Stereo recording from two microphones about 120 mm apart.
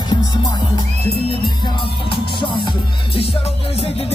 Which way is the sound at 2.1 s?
45° left (ahead or behind).